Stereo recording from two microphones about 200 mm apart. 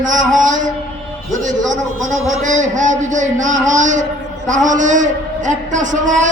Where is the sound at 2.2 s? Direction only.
40° right (ahead or behind).